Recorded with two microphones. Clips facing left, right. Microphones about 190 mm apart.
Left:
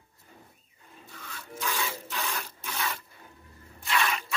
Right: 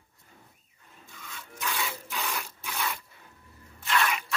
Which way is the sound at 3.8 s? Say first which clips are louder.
Right 1 dB; centre (ahead or behind).